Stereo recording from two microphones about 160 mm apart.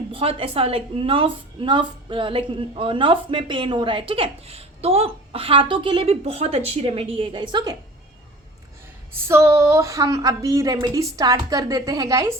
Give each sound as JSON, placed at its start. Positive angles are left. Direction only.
{"t": 0.1, "sound": "a woman's voice", "side_deg": -35}
{"t": 9.2, "sound": "a woman's voice", "side_deg": -15}